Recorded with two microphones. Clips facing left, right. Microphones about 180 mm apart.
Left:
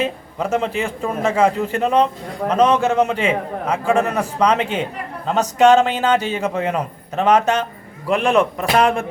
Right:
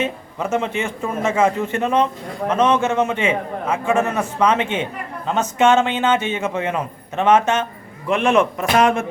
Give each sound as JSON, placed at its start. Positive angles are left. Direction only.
{"t": 0.0, "sound": "a man's voice", "side_deg": 35}